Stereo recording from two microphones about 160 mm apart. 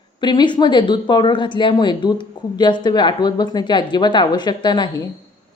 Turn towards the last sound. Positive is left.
turn(degrees=30)  # may be behind; listen again after turning